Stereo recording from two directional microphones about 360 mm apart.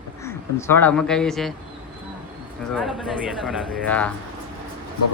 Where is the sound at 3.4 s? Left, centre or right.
Centre.